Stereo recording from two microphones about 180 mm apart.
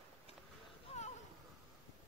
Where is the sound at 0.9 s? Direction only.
35° left (ahead or behind).